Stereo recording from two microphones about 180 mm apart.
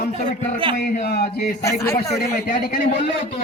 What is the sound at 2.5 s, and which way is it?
Speech, 50° left (ahead or behind).